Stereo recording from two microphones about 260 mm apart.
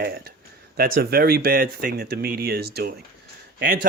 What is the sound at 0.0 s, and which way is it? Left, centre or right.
Speech, right.